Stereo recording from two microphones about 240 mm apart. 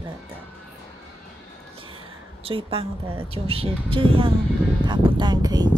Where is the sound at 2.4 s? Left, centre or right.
Right.